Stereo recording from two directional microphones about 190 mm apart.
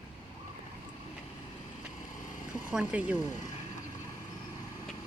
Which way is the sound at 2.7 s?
5° right (ahead or behind).